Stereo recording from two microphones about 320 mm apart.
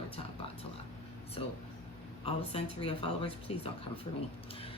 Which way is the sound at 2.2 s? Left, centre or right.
Centre.